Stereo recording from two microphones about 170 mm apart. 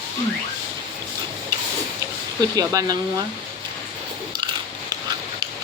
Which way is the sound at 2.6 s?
20° right (ahead or behind).